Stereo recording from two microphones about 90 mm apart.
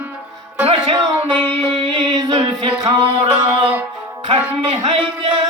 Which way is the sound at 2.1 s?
45° right (ahead or behind).